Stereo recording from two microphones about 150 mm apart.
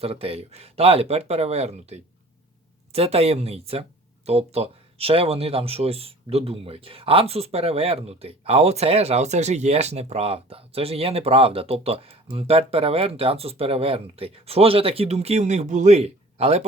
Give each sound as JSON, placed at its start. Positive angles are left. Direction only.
{"t": 0.0, "sound": "speech", "side_deg": -40}